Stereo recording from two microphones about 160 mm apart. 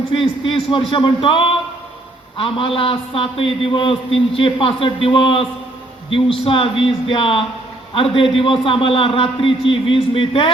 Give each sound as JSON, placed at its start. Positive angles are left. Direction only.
{"t": 0.1, "sound": "a man's voice", "side_deg": 35}